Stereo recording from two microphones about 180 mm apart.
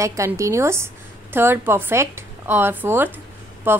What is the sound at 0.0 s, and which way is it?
A woman's voice, 15° right (ahead or behind).